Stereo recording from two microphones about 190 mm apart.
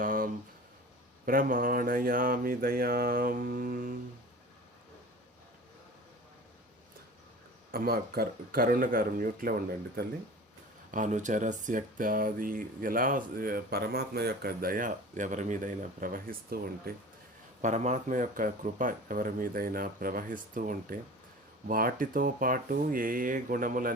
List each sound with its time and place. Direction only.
0.0 s a sound: 45° right (ahead or behind)
1.2 s speech: 45° right (ahead or behind)
7.7 s speech: 50° right (ahead or behind)
10.9 s speech: 40° right (ahead or behind)
17.6 s speech: 40° right (ahead or behind)